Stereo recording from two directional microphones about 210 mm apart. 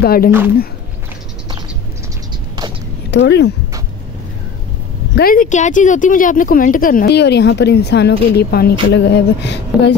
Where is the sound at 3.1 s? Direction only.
55° left (ahead or behind).